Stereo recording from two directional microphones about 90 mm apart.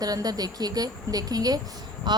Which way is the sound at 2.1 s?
55° right (ahead or behind).